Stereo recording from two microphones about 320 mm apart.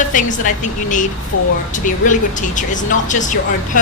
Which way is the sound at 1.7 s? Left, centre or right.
Left.